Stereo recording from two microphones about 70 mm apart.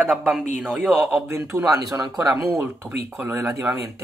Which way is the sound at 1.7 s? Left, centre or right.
Right.